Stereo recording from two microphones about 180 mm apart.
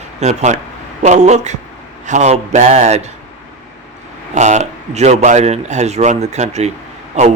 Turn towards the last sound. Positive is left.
turn(degrees=-40)  # may be behind; listen again after turning